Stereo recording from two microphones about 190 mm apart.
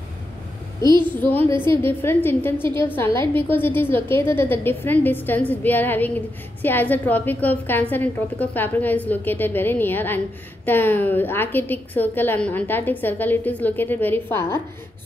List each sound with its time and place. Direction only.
0.8 s a woman's voice: 25° right (ahead or behind)
1.1 s a woman's voice: 10° left (ahead or behind)
1.5 s a woman's voice: 25° right (ahead or behind)
1.8 s a woman's voice: 10° left (ahead or behind)